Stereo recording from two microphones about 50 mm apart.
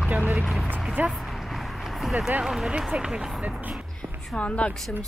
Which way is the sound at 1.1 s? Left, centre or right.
Centre.